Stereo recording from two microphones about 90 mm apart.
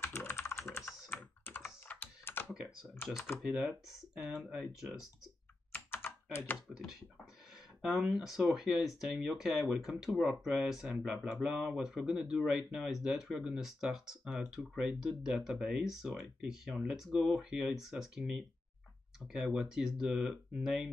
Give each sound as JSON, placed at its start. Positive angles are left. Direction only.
{"t": 0.0, "sound": "typing", "side_deg": 25}
{"t": 1.1, "sound": "computer keyboard", "side_deg": 25}
{"t": 2.5, "sound": "typing", "side_deg": -5}
{"t": 3.5, "sound": "speech", "side_deg": -10}
{"t": 6.0, "sound": "computer keyboard", "side_deg": 25}
{"t": 7.8, "sound": "speech", "side_deg": -5}